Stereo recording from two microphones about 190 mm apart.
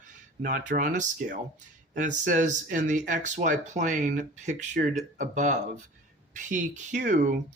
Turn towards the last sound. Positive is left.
turn(degrees=-40)  # may be behind; listen again after turning